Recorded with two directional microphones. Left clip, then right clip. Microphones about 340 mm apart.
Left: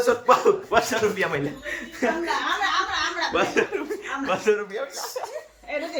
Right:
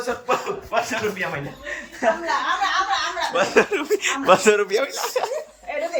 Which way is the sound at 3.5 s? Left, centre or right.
Centre.